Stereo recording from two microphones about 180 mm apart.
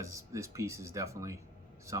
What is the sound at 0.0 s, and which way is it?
Speech, 15° right (ahead or behind).